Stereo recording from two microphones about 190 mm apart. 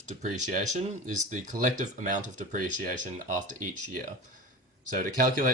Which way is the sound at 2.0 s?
45° right (ahead or behind).